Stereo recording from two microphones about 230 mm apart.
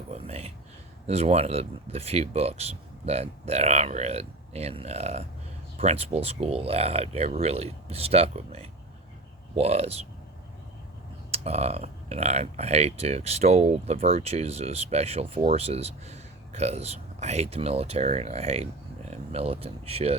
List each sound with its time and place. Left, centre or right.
0.1 s a sound: right
1.0 s speech: right
11.3 s speech: right